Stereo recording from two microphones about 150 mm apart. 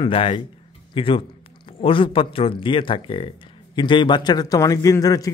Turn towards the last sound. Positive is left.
turn(degrees=25)  # may be behind; listen again after turning